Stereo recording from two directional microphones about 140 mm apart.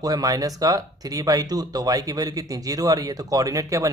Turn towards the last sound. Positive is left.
turn(degrees=-25)  # may be behind; listen again after turning